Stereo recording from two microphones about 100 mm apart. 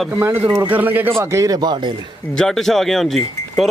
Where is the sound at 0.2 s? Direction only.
20° right (ahead or behind); by 2.0 s 50° right (ahead or behind).